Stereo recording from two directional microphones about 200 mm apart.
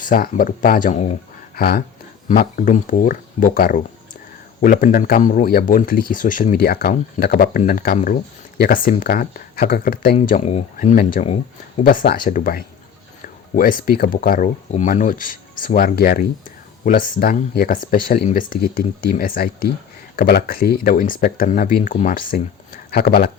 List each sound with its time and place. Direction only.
0.0 s a man's voice: 45° left (ahead or behind)